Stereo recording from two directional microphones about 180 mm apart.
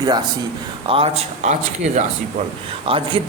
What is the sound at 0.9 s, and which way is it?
Speech, 35° right (ahead or behind).